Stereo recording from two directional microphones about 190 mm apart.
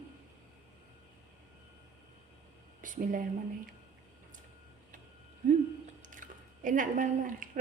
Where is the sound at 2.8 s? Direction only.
45° right (ahead or behind).